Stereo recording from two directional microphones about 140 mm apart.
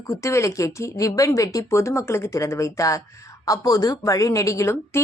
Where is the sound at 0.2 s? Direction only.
20° left (ahead or behind).